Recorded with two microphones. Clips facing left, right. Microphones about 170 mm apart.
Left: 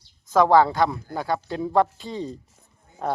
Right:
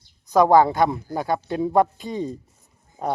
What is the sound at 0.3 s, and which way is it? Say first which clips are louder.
Speech: right 2 dB; 15° right (ahead or behind).